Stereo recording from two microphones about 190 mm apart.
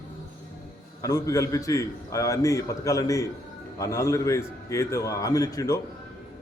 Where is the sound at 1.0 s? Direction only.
20° left (ahead or behind).